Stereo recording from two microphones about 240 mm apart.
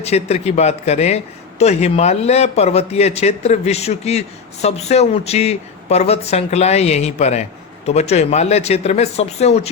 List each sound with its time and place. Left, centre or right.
0.0 s a man's voice: left